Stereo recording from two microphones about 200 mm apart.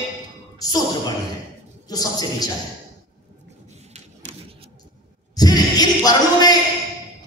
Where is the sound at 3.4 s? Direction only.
35° right (ahead or behind).